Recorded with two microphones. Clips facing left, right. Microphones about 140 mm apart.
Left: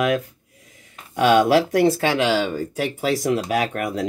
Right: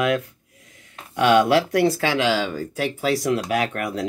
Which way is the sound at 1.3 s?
10° left (ahead or behind).